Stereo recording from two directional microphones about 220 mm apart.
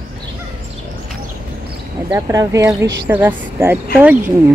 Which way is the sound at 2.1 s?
15° right (ahead or behind).